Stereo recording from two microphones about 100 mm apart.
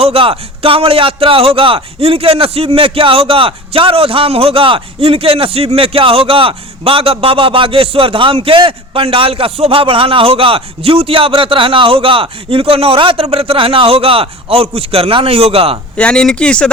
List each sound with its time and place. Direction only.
0.0 s speech: 70° right (ahead or behind)
16.0 s speech: 10° left (ahead or behind)